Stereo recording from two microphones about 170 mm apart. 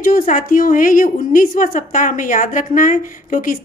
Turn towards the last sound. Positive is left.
turn(degrees=50)  # may be behind; listen again after turning